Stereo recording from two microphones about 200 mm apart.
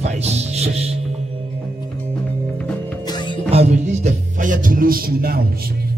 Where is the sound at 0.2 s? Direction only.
30° right (ahead or behind).